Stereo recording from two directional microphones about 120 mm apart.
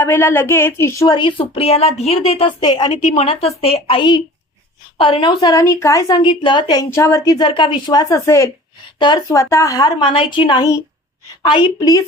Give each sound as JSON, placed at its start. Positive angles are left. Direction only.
{"t": 0.0, "sound": "speech", "side_deg": 20}
{"t": 1.1, "sound": "a woman's voice", "side_deg": 40}
{"t": 2.6, "sound": "speech", "side_deg": 35}
{"t": 2.9, "sound": "a woman's voice", "side_deg": 65}
{"t": 5.5, "sound": "speech", "side_deg": 25}
{"t": 6.2, "sound": "speech", "side_deg": 40}
{"t": 6.9, "sound": "speech", "side_deg": 25}
{"t": 7.3, "sound": "speech", "side_deg": 45}
{"t": 8.1, "sound": "speech", "side_deg": 25}
{"t": 9.0, "sound": "a woman's voice", "side_deg": 40}
{"t": 9.3, "sound": "speech", "side_deg": 25}
{"t": 10.0, "sound": "a woman's voice", "side_deg": 45}